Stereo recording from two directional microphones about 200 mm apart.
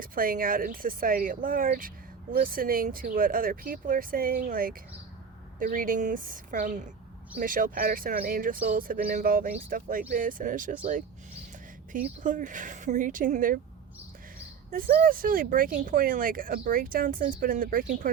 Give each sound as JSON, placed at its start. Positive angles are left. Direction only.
{"t": 0.0, "sound": "speech", "side_deg": -45}
{"t": 11.9, "sound": "speech", "side_deg": -40}
{"t": 14.7, "sound": "speech", "side_deg": -50}